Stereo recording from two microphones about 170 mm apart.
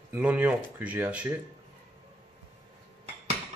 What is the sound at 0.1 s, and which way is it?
Speech, 10° right (ahead or behind).